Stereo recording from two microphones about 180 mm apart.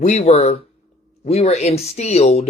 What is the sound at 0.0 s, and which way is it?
Speech, 40° left (ahead or behind).